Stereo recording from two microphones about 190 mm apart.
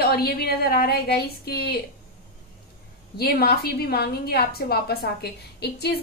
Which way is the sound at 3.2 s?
55° left (ahead or behind).